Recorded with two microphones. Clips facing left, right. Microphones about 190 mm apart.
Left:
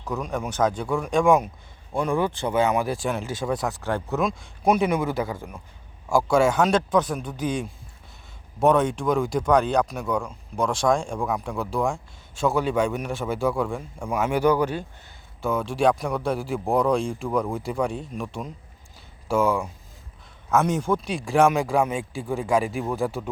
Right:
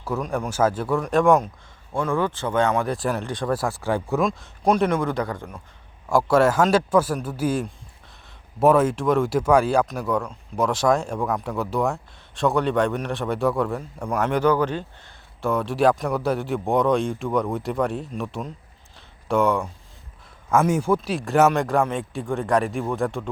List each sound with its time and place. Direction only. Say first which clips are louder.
0.0 s speech: right 2 dB; 5° right (ahead or behind)
1.9 s speech: even; 15° left (ahead or behind); by 4.2 s 10° right (ahead or behind)
4.2 s speech: right 2 dB; centre (ahead or behind)
6.1 s speech: right 2 dB; centre (ahead or behind)
15.4 s speech: right 2 dB; centre (ahead or behind)
18.9 s a sound: right 1 dB; centre (ahead or behind)
20.5 s speech: right 2 dB; 10° right (ahead or behind)